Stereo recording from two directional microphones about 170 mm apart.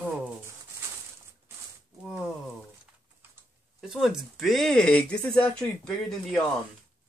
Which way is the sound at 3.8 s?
5° right (ahead or behind).